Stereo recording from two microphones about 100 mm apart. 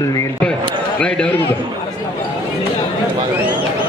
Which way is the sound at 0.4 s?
10° left (ahead or behind).